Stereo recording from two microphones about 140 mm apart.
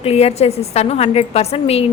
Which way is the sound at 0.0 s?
45° left (ahead or behind).